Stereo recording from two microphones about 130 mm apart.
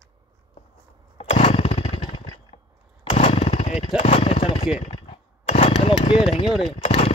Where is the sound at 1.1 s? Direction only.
50° left (ahead or behind).